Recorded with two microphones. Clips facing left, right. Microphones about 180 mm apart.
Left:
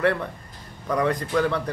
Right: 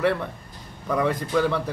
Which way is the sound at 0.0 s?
Centre (ahead or behind).